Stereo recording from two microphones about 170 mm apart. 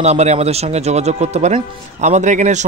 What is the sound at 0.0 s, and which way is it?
Speech, 40° right (ahead or behind).